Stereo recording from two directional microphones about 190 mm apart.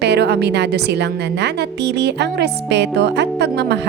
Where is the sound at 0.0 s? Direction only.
60° right (ahead or behind).